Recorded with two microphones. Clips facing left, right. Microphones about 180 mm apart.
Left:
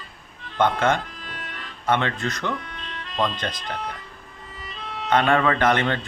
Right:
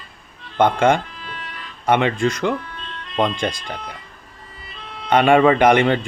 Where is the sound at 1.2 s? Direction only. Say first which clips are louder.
Right 2 dB; 50° left (ahead or behind).